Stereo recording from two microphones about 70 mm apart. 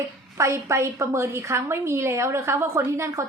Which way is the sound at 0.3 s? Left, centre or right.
Right.